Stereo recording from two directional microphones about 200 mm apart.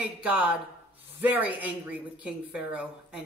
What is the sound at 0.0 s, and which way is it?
A woman's voice, 5° right (ahead or behind).